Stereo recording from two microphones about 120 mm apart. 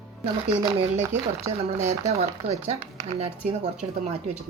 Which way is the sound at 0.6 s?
25° right (ahead or behind).